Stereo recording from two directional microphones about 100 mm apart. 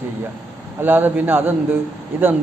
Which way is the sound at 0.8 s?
20° right (ahead or behind).